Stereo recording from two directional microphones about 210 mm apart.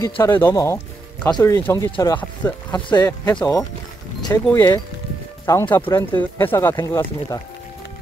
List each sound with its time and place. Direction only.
0.0 s speech: 10° left (ahead or behind)